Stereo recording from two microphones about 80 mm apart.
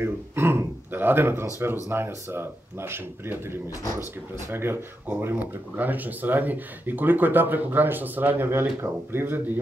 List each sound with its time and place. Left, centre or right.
0.0 s speech: right